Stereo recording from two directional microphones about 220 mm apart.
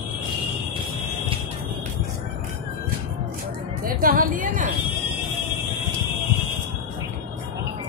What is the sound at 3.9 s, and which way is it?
Speech, 40° right (ahead or behind).